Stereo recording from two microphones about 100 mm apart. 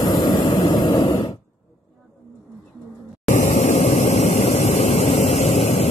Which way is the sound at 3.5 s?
90° left.